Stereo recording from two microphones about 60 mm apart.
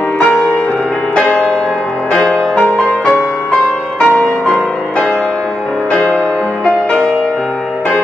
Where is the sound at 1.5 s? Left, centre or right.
Centre.